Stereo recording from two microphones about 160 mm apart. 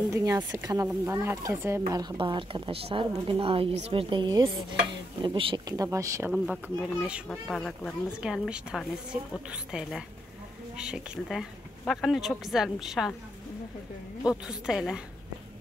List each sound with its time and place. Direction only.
0.1 s speech: 20° right (ahead or behind)
6.3 s a woman's voice: centre (ahead or behind)
7.2 s a woman's voice: 5° left (ahead or behind)
14.2 s a woman's voice: 5° right (ahead or behind)